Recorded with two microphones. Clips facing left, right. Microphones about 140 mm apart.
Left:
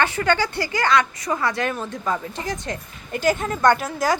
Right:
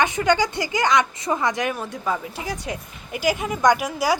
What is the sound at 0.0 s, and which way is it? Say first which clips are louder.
A woman's voice: right 1 dB; 15° right (ahead or behind).